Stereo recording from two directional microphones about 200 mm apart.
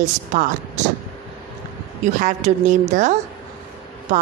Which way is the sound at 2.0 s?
35° right (ahead or behind).